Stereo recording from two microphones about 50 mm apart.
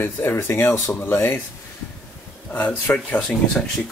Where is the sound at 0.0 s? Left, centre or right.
Left.